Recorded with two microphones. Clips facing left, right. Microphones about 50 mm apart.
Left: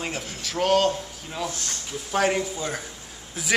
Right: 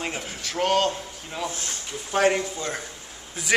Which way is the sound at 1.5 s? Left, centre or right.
Right.